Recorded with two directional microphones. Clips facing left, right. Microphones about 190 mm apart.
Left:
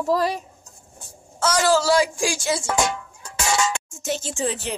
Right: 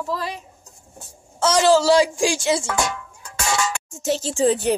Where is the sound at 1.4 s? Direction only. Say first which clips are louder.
Right 3 dB; 25° right (ahead or behind).